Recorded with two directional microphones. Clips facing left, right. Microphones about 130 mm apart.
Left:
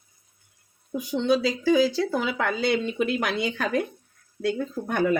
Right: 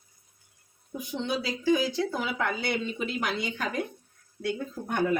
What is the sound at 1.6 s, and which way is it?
Speech, 85° left.